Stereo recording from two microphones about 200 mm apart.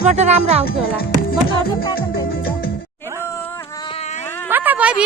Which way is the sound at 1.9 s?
50° left (ahead or behind).